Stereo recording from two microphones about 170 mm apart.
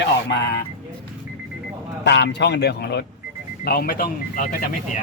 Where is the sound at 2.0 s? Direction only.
90° left; by 3.1 s 75° left (ahead or behind).